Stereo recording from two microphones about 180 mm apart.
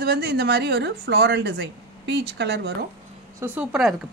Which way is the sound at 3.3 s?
10° right (ahead or behind).